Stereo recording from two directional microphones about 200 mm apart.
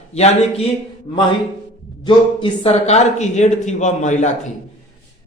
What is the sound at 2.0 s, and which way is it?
Speech, 25° left (ahead or behind).